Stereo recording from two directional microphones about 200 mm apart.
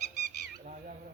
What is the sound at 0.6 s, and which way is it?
Crow, 40° right (ahead or behind).